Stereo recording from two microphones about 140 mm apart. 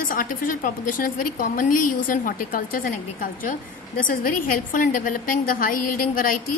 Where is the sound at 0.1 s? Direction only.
80° left.